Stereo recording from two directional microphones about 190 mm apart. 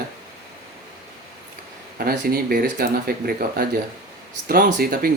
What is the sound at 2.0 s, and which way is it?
Speech, 50° right (ahead or behind).